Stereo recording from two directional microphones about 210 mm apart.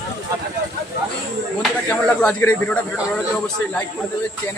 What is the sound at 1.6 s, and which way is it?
Speech, 5° left (ahead or behind).